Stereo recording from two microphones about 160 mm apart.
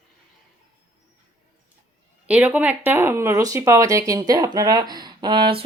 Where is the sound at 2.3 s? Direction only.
10° right (ahead or behind).